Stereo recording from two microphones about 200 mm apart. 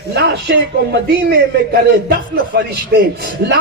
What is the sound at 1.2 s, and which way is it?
A man's voice, 55° right (ahead or behind).